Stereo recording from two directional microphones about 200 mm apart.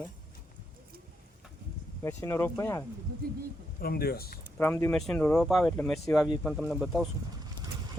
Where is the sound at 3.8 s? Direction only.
50° left (ahead or behind).